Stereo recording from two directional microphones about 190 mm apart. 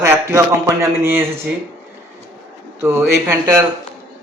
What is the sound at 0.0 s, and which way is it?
Speech, 15° right (ahead or behind).